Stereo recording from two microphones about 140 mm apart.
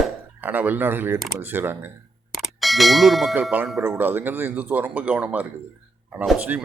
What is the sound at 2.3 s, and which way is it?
Clang, centre (ahead or behind).